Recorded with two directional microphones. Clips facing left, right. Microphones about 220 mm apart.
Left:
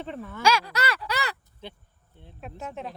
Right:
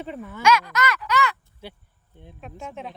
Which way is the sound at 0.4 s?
30° left (ahead or behind).